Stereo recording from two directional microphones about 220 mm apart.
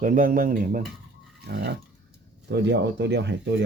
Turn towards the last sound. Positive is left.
turn(degrees=-50)  # may be behind; listen again after turning